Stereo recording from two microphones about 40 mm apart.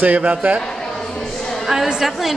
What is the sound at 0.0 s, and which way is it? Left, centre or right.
Speech, right.